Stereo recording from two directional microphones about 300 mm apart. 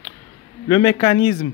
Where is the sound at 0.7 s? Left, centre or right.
Centre.